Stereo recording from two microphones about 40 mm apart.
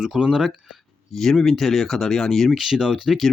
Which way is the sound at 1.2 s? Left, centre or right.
Centre.